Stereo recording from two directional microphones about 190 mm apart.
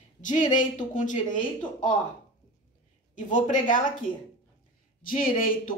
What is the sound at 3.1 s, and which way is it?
Speech, 40° left (ahead or behind).